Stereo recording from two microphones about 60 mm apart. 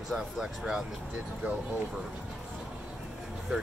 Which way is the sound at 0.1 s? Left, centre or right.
Centre.